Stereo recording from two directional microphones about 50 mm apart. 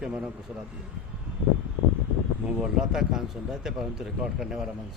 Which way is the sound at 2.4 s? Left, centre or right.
Right.